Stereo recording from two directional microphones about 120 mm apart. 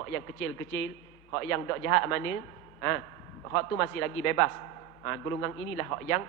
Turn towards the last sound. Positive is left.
turn(degrees=20)  # may be behind; listen again after turning